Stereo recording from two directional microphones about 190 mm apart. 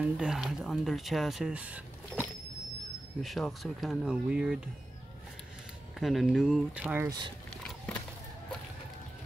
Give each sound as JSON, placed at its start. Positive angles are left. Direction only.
{"t": 0.0, "sound": "speech", "side_deg": -5}
{"t": 5.9, "sound": "speech", "side_deg": 0}
{"t": 7.1, "sound": "speech", "side_deg": -25}